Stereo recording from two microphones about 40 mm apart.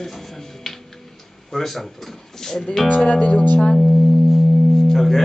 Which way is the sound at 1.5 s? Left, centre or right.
Centre.